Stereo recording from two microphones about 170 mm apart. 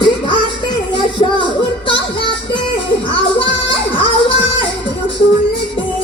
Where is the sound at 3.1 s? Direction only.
30° left (ahead or behind).